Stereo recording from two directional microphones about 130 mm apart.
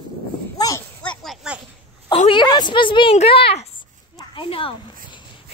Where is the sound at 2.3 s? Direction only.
35° left (ahead or behind).